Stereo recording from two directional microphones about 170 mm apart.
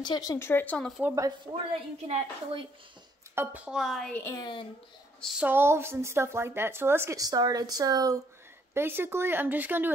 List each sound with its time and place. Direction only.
0.0 s speech: 25° left (ahead or behind); by 1.0 s 5° left (ahead or behind)
1.0 s speech: 20° right (ahead or behind)
1.7 s a woman's voice: 35° right (ahead or behind)
3.3 s a woman's voice: 10° right (ahead or behind)
4.2 s speech: 15° left (ahead or behind)
5.2 s speech: 5° right (ahead or behind)